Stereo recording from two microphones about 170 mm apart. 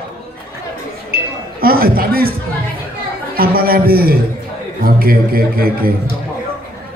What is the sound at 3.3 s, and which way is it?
A man's voice, 60° right (ahead or behind).